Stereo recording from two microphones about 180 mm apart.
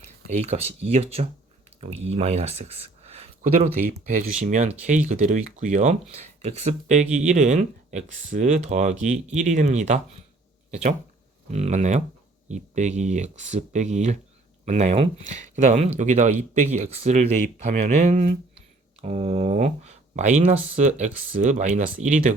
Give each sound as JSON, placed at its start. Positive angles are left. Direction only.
{"t": 0.3, "sound": "speech", "side_deg": -40}
{"t": 3.1, "sound": "a sound", "side_deg": -35}
{"t": 4.0, "sound": "speech", "side_deg": -40}